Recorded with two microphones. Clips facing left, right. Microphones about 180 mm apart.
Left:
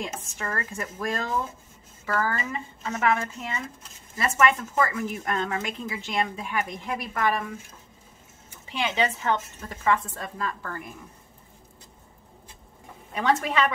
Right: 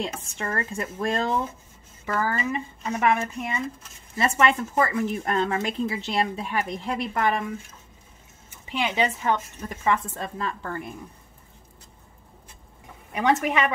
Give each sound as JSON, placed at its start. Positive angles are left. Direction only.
{"t": 0.0, "sound": "speech", "side_deg": -30}
{"t": 2.1, "sound": "a woman's voice", "side_deg": -20}
{"t": 4.2, "sound": "speech", "side_deg": -30}
{"t": 8.8, "sound": "a woman's voice", "side_deg": -15}
{"t": 13.1, "sound": "a woman's voice", "side_deg": -15}